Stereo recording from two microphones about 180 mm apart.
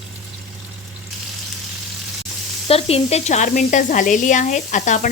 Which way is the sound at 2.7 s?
35° left (ahead or behind).